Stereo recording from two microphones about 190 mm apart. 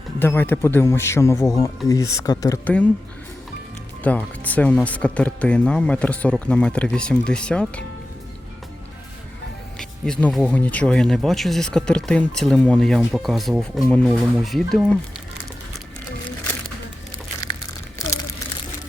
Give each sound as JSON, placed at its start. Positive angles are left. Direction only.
{"t": 0.2, "sound": "speech", "side_deg": 10}
{"t": 4.0, "sound": "speech", "side_deg": 10}
{"t": 9.7, "sound": "speech", "side_deg": 5}